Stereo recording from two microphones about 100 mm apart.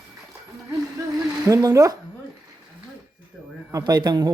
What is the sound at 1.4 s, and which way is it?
Speech, 40° right (ahead or behind).